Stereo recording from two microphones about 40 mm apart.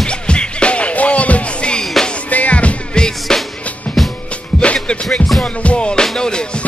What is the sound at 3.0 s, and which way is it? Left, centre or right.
Music, centre.